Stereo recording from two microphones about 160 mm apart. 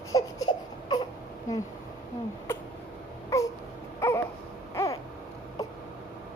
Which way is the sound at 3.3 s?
20° left (ahead or behind).